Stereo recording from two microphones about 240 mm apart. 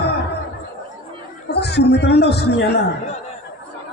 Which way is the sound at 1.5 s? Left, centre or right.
Left.